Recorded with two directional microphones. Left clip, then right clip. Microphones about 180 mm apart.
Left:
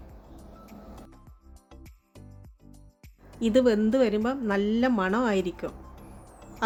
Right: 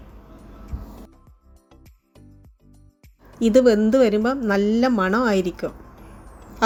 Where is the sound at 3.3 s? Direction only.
10° right (ahead or behind).